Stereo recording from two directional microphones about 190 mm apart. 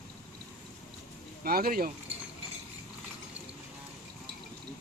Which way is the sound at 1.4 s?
50° right (ahead or behind).